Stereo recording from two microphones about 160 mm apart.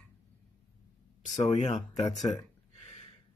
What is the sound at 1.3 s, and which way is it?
Speech, 45° left (ahead or behind).